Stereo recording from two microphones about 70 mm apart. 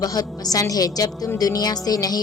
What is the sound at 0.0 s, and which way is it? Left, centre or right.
A woman's voice, left.